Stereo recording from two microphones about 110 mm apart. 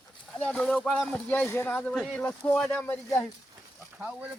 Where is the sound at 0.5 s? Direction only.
5° left (ahead or behind).